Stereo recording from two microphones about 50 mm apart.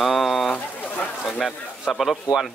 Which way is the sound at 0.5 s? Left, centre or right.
Left.